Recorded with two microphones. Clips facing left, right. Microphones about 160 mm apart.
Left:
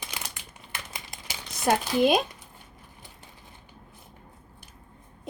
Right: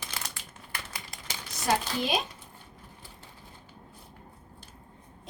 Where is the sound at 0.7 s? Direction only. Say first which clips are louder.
Left 1 dB; 20° left (ahead or behind).